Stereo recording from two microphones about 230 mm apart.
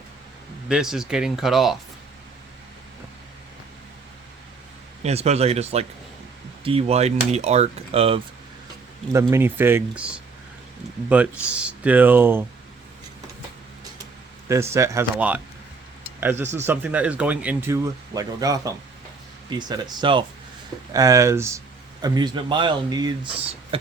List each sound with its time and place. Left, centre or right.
0.7 s speech: centre
5.0 s speech: right
9.3 s speech: centre
14.4 s speech: centre